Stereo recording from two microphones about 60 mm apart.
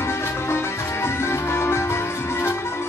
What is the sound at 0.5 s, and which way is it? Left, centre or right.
Music, left.